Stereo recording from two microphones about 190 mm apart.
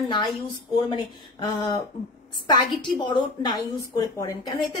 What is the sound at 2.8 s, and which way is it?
A woman's voice, 25° left (ahead or behind).